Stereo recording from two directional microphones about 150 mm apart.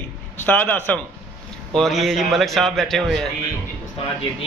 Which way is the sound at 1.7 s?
Centre (ahead or behind).